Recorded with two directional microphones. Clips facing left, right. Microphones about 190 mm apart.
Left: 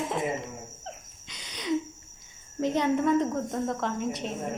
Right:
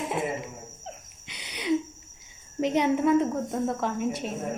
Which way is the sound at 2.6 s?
15° right (ahead or behind).